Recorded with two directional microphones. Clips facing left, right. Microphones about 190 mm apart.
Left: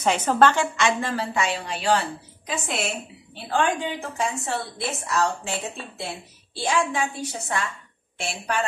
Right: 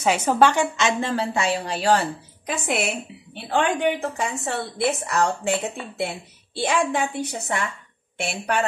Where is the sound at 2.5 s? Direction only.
65° right (ahead or behind).